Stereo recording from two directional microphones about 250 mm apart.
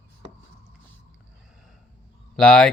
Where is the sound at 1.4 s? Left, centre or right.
Centre.